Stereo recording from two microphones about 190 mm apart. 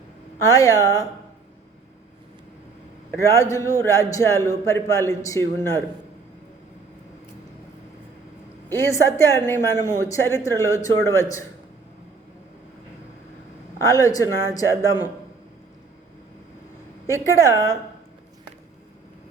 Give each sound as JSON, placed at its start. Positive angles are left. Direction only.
{"t": 0.4, "sound": "a man's voice", "side_deg": 15}
{"t": 3.1, "sound": "a man's voice", "side_deg": 15}
{"t": 8.7, "sound": "a man's voice", "side_deg": 15}
{"t": 13.8, "sound": "speech", "side_deg": 20}
{"t": 17.1, "sound": "a man's voice", "side_deg": 15}